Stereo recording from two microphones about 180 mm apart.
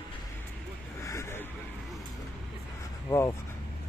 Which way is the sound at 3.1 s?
15° left (ahead or behind).